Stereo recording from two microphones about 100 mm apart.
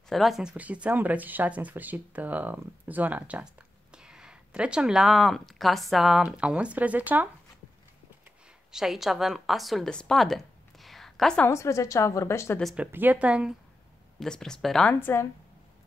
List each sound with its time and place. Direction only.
0.1 s speech: centre (ahead or behind)
6.2 s speech: 10° right (ahead or behind)
8.7 s a woman's voice: 5° right (ahead or behind)
11.4 s a woman's voice: 30° left (ahead or behind)
12.7 s speech: 15° right (ahead or behind)
14.2 s speech: 5° left (ahead or behind)
15.0 s a woman's voice: 20° left (ahead or behind)